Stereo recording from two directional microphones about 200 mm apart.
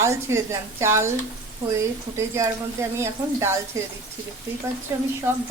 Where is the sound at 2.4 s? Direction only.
15° right (ahead or behind).